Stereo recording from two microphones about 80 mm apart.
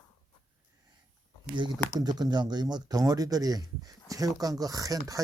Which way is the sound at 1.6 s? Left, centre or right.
Right.